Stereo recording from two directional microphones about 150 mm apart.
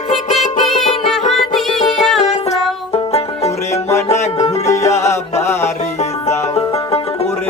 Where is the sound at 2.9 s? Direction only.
40° left (ahead or behind).